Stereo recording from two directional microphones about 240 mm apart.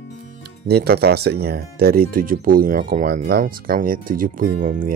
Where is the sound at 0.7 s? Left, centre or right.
Right.